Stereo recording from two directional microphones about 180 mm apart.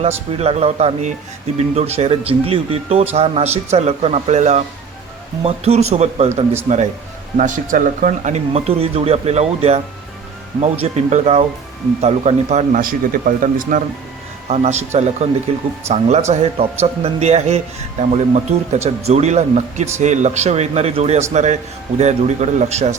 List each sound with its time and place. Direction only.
0.3 s speech: 35° right (ahead or behind)
14.5 s speech: 35° right (ahead or behind)